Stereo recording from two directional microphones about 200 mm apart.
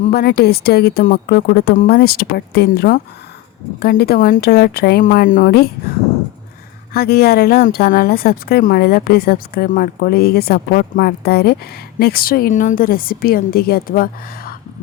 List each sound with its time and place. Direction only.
0.0 s speech: 50° left (ahead or behind)
6.9 s speech: 50° left (ahead or behind)